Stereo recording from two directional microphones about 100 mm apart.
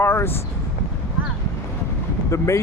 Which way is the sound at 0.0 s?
25° left (ahead or behind).